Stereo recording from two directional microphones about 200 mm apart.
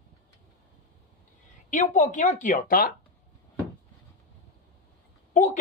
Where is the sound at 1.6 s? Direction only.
40° left (ahead or behind).